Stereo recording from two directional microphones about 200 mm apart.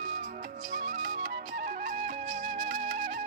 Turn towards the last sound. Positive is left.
turn(degrees=-40)  # may be behind; listen again after turning